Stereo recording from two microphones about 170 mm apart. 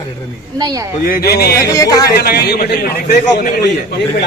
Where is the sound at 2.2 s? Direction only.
65° left (ahead or behind).